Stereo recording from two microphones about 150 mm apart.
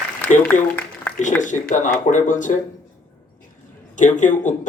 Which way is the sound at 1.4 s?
55° left (ahead or behind).